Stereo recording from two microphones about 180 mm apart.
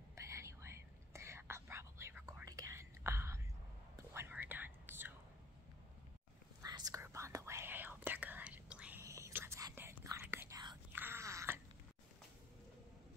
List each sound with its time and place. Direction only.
0.1 s whispering: 15° right (ahead or behind)
6.6 s whispering: 20° right (ahead or behind)
9.0 s whispering: 15° right (ahead or behind)
10.9 s wail: 10° right (ahead or behind)